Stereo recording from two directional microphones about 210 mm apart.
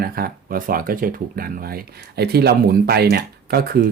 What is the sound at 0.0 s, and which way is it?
Speech, 45° right (ahead or behind).